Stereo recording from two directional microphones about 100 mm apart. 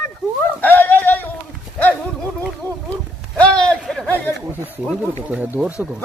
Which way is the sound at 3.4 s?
10° left (ahead or behind).